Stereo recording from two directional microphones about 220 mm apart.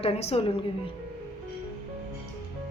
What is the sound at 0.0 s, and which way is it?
Speech, 30° left (ahead or behind).